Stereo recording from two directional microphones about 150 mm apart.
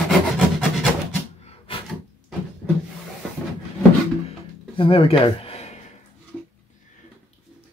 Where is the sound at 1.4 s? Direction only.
40° left (ahead or behind).